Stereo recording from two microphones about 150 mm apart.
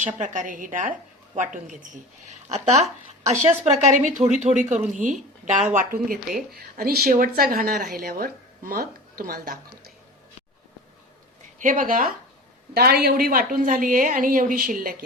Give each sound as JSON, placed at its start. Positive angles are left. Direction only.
{"t": 0.0, "sound": "a woman's voice", "side_deg": -55}
{"t": 2.2, "sound": "a woman's voice", "side_deg": -50}
{"t": 6.5, "sound": "a woman's voice", "side_deg": -90}
{"t": 11.6, "sound": "a woman's voice", "side_deg": -60}
{"t": 12.7, "sound": "a woman's voice", "side_deg": -90}